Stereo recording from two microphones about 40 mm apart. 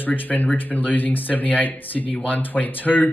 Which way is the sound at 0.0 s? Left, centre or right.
Left.